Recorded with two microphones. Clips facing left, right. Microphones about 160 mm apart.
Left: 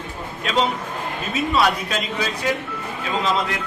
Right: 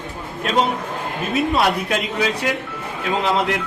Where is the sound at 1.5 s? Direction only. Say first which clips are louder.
Right 1 dB; 55° right (ahead or behind).